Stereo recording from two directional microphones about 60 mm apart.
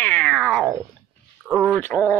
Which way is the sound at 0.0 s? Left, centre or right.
Left.